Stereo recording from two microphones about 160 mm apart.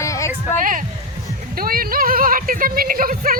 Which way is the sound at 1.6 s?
65° right (ahead or behind).